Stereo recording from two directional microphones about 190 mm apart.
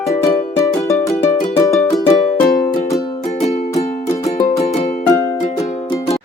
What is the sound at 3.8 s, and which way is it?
Music, 35° left (ahead or behind).